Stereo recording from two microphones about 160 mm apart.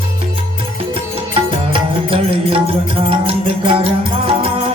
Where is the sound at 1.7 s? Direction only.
35° right (ahead or behind).